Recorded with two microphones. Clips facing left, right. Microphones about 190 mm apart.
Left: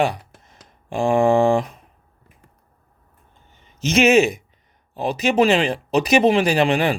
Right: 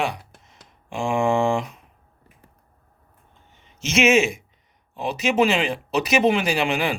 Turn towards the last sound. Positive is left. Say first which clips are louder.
# left 5 dB
turn(degrees=35)  # may be behind; listen again after turning